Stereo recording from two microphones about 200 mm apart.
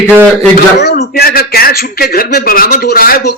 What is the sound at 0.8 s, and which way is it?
Speech, 55° left (ahead or behind).